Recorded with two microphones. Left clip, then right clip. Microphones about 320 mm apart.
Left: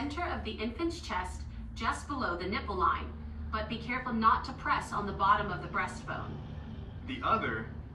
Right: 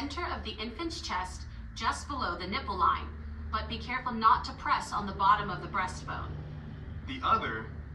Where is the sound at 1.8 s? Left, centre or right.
Right.